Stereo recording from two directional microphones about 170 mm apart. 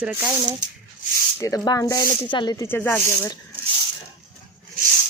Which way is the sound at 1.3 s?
20° left (ahead or behind).